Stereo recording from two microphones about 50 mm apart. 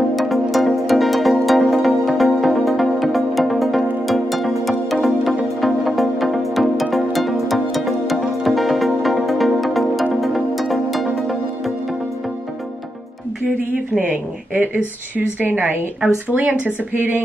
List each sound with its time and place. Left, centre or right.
0.1 s music: centre
13.9 s a sound: right
15.1 s speech: right